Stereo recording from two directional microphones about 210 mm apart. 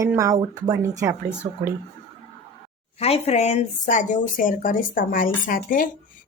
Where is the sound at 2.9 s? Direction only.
30° left (ahead or behind).